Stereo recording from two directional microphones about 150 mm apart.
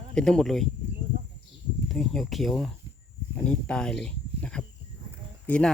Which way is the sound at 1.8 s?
5° left (ahead or behind).